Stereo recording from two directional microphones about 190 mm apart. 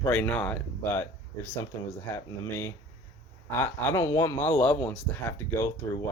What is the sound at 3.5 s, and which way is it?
Speech, 15° left (ahead or behind).